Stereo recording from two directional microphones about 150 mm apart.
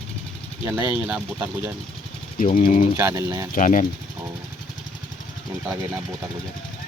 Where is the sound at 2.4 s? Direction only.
65° left (ahead or behind).